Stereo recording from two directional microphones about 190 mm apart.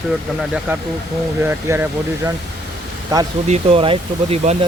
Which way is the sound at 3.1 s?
15° right (ahead or behind).